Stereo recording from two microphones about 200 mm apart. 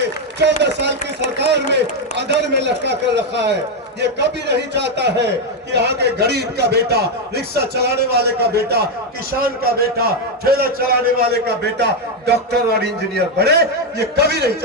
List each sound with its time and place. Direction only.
0.3 s a man's voice: 60° right (ahead or behind)